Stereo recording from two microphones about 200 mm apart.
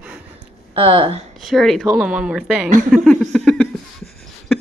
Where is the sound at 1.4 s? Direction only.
Centre (ahead or behind).